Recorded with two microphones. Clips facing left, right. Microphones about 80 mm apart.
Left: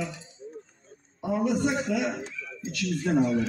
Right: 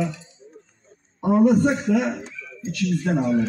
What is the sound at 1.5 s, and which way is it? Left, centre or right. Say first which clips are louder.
Speech: right 7 dB; right.